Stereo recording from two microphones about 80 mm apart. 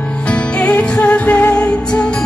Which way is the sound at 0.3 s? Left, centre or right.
Centre.